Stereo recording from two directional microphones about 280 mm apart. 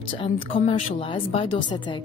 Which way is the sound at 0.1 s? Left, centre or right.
Centre.